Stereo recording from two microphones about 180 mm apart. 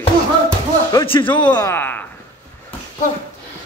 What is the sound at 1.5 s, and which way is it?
Speech, 15° left (ahead or behind).